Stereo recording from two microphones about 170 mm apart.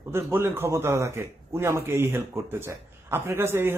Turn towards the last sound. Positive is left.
turn(degrees=-15)  # may be behind; listen again after turning